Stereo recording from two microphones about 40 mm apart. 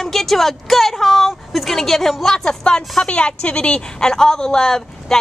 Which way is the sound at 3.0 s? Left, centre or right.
Left.